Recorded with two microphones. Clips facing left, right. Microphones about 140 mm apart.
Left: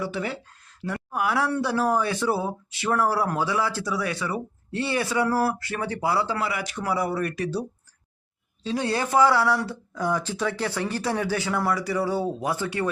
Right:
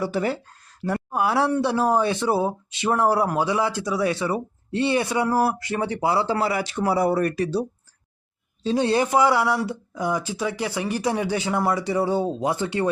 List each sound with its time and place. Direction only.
0.0 s speech: 40° right (ahead or behind)
8.6 s speech: 25° right (ahead or behind)